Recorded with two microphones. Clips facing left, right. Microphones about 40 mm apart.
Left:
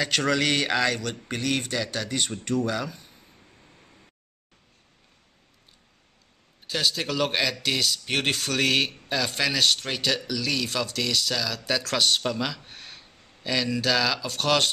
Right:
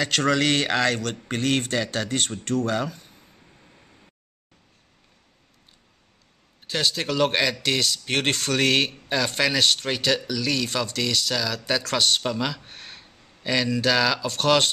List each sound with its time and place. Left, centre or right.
0.0 s speech: centre
1.7 s speech: right
2.0 s speech: centre
2.6 s speech: centre
6.7 s speech: centre